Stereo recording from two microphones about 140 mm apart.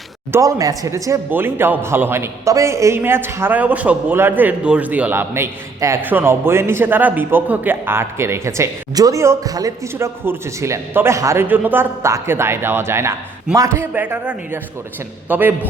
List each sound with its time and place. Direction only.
0.3 s a man's voice: 20° right (ahead or behind)